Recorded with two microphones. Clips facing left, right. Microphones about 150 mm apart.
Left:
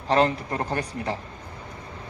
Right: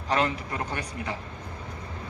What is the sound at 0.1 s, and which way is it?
A man's voice, 35° left (ahead or behind).